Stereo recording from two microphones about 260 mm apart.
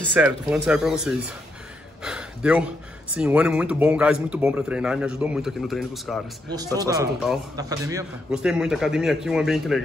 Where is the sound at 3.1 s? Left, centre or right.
Centre.